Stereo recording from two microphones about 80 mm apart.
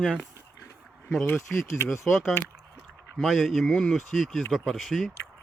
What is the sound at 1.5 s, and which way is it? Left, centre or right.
Speech, left.